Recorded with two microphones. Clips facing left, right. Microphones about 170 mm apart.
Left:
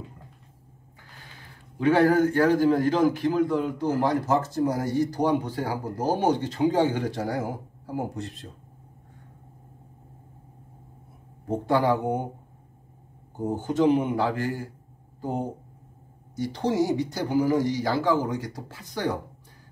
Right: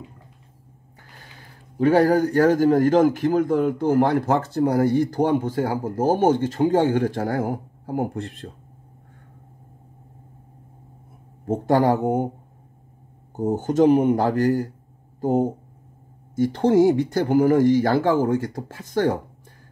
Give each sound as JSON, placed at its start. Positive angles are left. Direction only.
{"t": 1.8, "sound": "a man's voice", "side_deg": -40}
{"t": 11.5, "sound": "a man's voice", "side_deg": -45}
{"t": 13.4, "sound": "a man's voice", "side_deg": -45}